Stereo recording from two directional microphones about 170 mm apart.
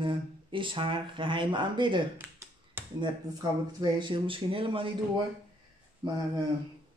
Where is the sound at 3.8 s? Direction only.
30° right (ahead or behind).